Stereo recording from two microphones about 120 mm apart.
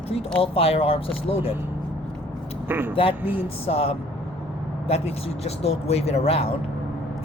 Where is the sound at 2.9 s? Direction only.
50° left (ahead or behind).